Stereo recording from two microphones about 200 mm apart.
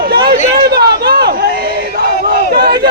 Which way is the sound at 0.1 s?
50° right (ahead or behind).